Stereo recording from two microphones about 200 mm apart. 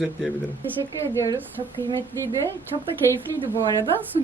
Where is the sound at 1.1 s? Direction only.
15° left (ahead or behind).